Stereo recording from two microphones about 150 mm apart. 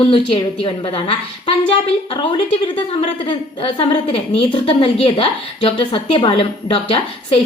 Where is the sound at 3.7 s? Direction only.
40° left (ahead or behind).